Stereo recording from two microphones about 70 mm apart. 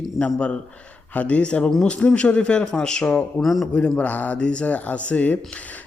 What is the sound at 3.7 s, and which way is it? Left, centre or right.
A man's voice, centre.